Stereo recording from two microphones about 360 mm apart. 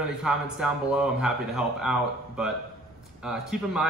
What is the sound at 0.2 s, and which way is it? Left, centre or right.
Speech, centre.